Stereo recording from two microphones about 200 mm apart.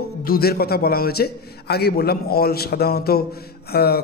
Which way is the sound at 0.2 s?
50° left (ahead or behind).